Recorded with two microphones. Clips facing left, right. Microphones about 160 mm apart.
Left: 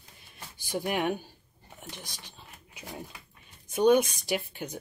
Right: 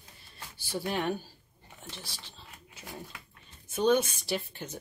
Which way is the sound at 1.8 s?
15° left (ahead or behind).